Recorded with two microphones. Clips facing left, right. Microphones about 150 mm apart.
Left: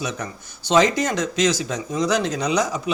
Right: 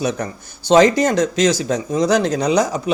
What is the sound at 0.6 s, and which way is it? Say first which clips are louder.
Speech: right 6 dB; 40° right (ahead or behind).